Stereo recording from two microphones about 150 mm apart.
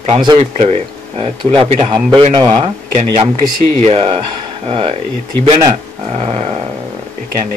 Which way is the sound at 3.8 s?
40° right (ahead or behind).